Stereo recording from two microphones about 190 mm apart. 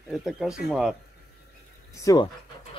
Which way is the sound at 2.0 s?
20° left (ahead or behind).